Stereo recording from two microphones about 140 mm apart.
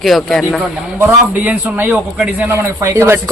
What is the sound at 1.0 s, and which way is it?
A man's voice, 15° right (ahead or behind).